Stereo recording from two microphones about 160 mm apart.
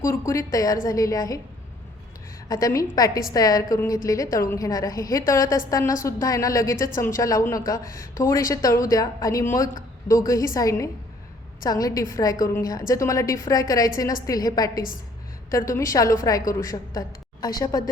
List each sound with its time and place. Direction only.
0.0 s a woman's voice: 20° left (ahead or behind)
2.5 s a woman's voice: 20° left (ahead or behind)